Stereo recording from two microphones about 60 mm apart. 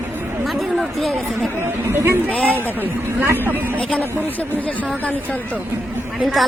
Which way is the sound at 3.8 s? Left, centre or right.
Left.